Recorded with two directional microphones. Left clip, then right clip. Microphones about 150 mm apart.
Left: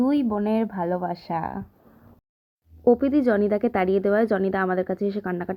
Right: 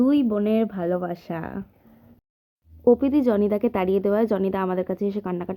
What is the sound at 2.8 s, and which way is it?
A woman's voice, 10° left (ahead or behind).